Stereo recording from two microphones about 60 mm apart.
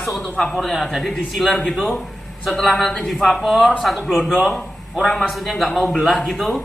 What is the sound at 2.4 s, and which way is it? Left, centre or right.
A man's voice, centre.